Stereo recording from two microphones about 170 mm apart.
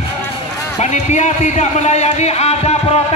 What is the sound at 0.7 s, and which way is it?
A man's voice, 40° left (ahead or behind).